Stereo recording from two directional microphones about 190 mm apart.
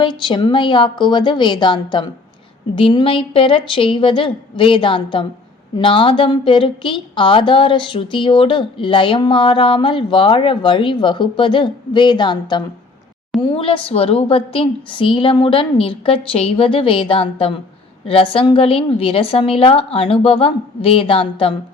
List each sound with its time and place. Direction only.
0.0 s a woman's voice: 25° left (ahead or behind)